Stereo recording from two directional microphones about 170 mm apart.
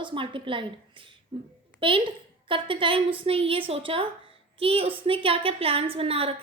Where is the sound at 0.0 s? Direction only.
30° right (ahead or behind).